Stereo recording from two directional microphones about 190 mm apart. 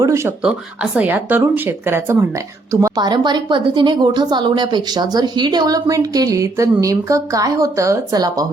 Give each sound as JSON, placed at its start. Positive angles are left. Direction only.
{"t": 0.0, "sound": "speech", "side_deg": -15}